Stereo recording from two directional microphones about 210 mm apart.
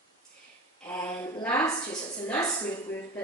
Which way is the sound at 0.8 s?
10° left (ahead or behind).